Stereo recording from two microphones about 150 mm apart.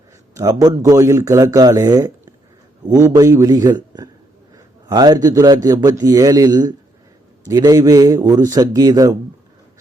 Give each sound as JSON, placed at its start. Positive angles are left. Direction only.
{"t": 0.3, "sound": "a man's voice", "side_deg": -25}